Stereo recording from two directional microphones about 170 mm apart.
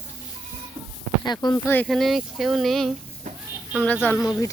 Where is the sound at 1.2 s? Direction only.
25° left (ahead or behind).